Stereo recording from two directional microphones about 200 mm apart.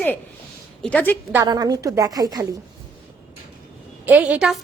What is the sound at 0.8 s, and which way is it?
Speech, 5° left (ahead or behind).